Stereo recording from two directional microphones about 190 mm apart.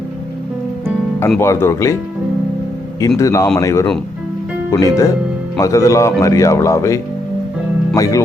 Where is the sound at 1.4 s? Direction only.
15° left (ahead or behind).